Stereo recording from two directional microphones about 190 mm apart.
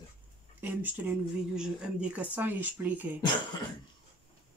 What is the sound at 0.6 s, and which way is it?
Speech, 10° right (ahead or behind).